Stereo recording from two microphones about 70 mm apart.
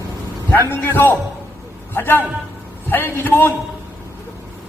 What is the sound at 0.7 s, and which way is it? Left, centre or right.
A man's voice, left.